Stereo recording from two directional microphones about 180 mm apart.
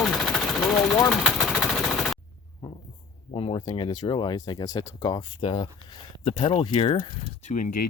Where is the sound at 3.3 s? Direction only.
30° left (ahead or behind).